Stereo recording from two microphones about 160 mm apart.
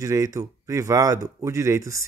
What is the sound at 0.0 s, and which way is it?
Speech, 20° right (ahead or behind).